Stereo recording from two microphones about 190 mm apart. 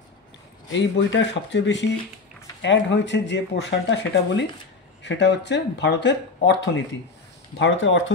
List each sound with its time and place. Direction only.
0.7 s speech: 75° left (ahead or behind)